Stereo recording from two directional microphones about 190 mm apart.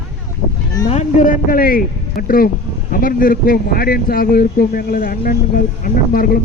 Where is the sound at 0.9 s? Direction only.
40° left (ahead or behind).